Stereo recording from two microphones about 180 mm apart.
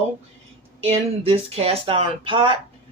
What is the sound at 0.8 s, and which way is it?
Speech, 35° right (ahead or behind).